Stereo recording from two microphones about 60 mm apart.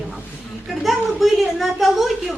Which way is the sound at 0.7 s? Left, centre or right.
Centre.